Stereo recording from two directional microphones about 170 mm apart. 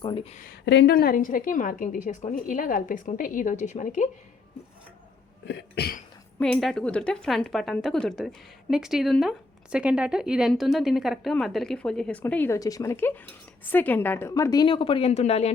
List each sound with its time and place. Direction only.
0.0 s speech: 30° left (ahead or behind)
0.6 s a woman's voice: 90° left; by 4.1 s 45° left (ahead or behind)
5.5 s cough: 80° left
6.4 s a woman's voice: centre (ahead or behind); by 15.5 s 40° left (ahead or behind)